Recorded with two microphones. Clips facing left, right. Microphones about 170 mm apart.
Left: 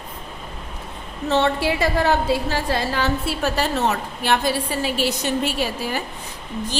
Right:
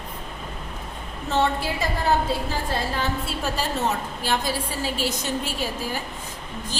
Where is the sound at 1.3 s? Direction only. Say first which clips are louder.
Left 4 dB; 75° left (ahead or behind).